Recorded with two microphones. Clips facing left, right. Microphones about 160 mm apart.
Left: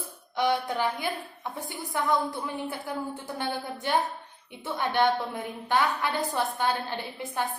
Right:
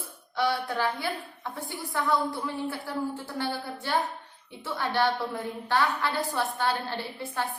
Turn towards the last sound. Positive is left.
turn(degrees=15)  # may be behind; listen again after turning